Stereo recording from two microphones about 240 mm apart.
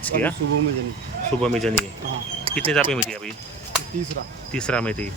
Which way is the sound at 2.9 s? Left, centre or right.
Centre.